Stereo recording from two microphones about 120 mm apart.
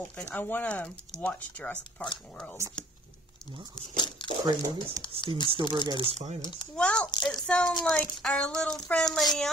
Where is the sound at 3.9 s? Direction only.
40° left (ahead or behind).